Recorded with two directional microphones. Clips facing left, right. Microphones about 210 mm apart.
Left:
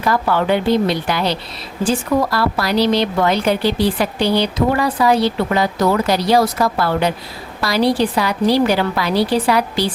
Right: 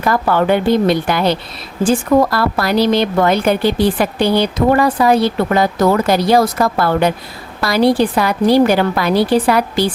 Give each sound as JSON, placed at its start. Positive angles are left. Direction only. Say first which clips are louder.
{"t": 0.0, "sound": "speech", "louder": "right 3 dB", "side_deg": -50}